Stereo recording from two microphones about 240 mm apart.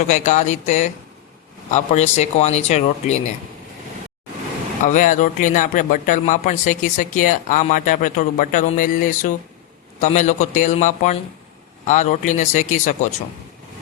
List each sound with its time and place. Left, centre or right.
0.1 s speech: left
4.9 s speech: left